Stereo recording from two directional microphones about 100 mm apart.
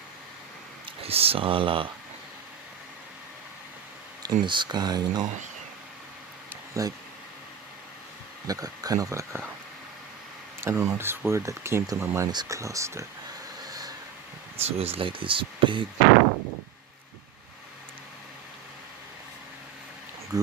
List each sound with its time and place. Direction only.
1.0 s speech: 75° right (ahead or behind)
4.2 s speech: 45° right (ahead or behind)
6.8 s speech: 35° right (ahead or behind)
8.4 s speech: 40° right (ahead or behind)
10.6 s speech: 25° right (ahead or behind)
12.3 s speech: 45° right (ahead or behind)
12.5 s speech: 30° right (ahead or behind)
13.7 s vehicle: 40° right (ahead or behind)
14.6 s speech: 75° right (ahead or behind); by 15.8 s 55° right (ahead or behind)
20.3 s speech: 35° right (ahead or behind)